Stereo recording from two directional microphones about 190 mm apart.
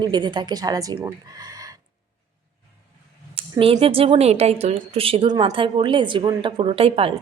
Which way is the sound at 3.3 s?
30° right (ahead or behind).